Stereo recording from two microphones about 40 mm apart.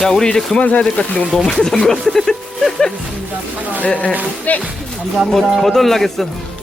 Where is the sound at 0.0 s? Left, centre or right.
Centre.